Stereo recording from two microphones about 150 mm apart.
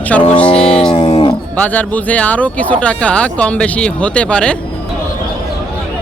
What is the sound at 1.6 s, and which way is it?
Speech, 10° left (ahead or behind).